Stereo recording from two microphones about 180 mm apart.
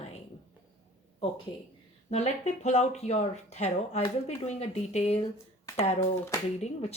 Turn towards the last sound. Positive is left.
turn(degrees=35)  # may be behind; listen again after turning